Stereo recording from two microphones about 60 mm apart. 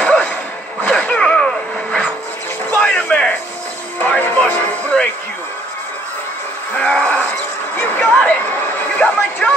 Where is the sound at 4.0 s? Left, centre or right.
Left.